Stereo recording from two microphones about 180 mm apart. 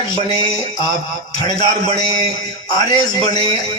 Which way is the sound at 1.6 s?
25° left (ahead or behind).